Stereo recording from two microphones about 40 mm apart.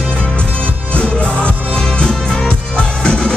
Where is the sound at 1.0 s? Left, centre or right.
Left.